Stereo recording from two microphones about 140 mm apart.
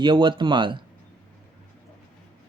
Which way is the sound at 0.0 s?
35° right (ahead or behind).